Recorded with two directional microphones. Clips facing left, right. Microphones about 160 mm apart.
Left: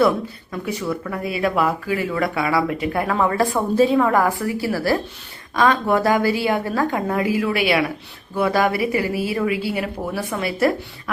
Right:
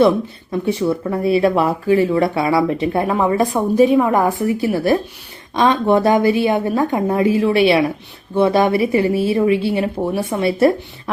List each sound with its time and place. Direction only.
0.5 s speech: 25° right (ahead or behind)